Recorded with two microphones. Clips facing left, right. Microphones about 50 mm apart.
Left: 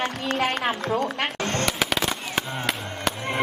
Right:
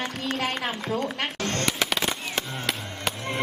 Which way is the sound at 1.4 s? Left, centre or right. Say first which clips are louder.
Left 2 dB; centre.